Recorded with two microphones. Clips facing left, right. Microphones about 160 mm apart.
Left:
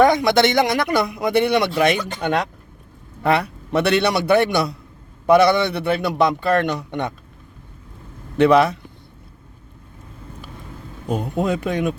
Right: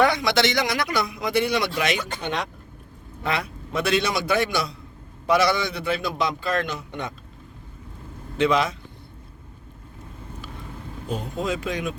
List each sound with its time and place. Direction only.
0.0 s speech: 50° left (ahead or behind); by 7.1 s 65° left (ahead or behind)
8.4 s speech: 60° left (ahead or behind)
11.1 s speech: 55° left (ahead or behind)